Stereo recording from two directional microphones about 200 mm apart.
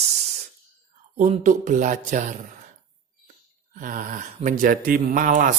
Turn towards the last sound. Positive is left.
turn(degrees=-40)  # may be behind; listen again after turning